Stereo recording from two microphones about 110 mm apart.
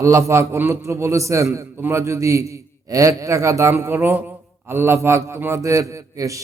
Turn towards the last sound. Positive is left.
turn(degrees=-30)  # may be behind; listen again after turning